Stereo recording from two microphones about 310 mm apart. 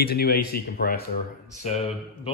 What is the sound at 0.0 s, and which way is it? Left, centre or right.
A man's voice, left.